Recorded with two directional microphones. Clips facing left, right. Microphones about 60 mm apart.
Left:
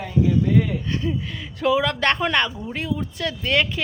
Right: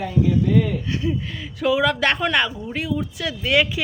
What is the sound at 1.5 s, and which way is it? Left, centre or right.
Speech, centre.